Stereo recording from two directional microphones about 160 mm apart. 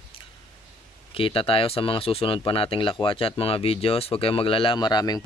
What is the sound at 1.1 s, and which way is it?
Speech, 35° left (ahead or behind).